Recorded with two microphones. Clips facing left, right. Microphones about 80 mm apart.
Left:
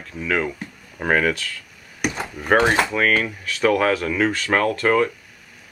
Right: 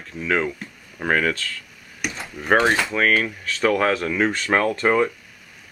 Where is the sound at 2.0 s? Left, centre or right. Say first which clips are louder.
Left 5 dB; left.